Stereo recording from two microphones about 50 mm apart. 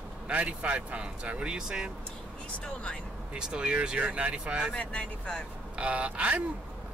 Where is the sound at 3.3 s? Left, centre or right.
Centre.